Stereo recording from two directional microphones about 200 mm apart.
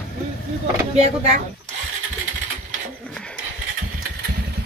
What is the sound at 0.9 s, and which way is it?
Speech, 30° right (ahead or behind).